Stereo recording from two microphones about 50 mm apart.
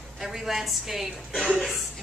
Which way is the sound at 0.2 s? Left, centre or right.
Centre.